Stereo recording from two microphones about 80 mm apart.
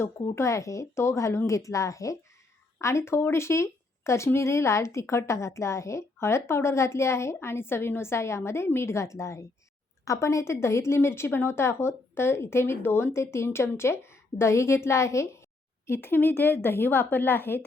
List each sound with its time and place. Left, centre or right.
0.0 s a woman's voice: left